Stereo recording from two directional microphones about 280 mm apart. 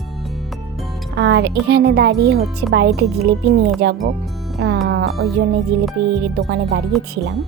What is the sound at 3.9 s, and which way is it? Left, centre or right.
Speech, centre.